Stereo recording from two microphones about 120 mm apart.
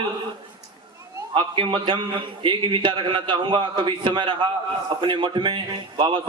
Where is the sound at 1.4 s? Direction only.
40° right (ahead or behind).